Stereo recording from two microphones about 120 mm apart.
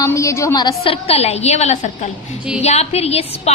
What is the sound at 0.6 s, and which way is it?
A woman's voice, 50° left (ahead or behind).